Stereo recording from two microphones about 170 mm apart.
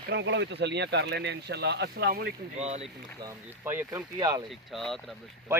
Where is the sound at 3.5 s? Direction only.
15° right (ahead or behind).